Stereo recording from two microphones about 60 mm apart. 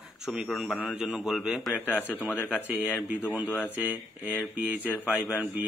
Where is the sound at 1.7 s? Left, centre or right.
Left.